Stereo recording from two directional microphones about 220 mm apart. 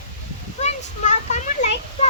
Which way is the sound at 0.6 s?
30° left (ahead or behind).